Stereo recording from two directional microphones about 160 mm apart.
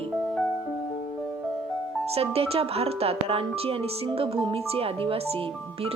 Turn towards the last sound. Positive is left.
turn(degrees=-35)  # may be behind; listen again after turning